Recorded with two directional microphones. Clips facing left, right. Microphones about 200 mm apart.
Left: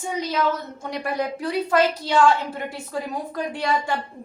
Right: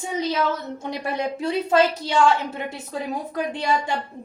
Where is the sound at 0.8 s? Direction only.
25° right (ahead or behind).